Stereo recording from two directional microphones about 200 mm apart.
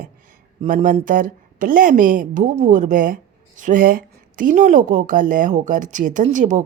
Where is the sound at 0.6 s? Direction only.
40° right (ahead or behind).